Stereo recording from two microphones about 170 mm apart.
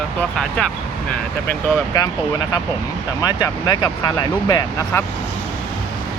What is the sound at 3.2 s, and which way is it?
Speech, 20° left (ahead or behind).